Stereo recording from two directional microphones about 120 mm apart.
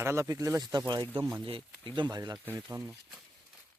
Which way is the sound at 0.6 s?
35° right (ahead or behind).